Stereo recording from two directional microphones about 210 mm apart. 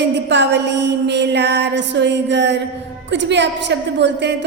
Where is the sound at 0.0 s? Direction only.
55° right (ahead or behind).